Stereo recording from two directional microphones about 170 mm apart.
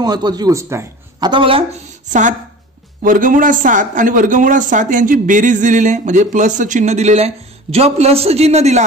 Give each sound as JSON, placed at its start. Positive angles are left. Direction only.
{"t": 0.0, "sound": "a man's voice", "side_deg": -25}
{"t": 1.3, "sound": "speech", "side_deg": -30}
{"t": 3.0, "sound": "a man's voice", "side_deg": -50}